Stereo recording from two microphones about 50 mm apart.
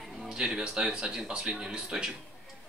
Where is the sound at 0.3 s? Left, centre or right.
Centre.